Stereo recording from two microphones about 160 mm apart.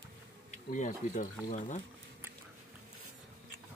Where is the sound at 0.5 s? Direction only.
50° left (ahead or behind).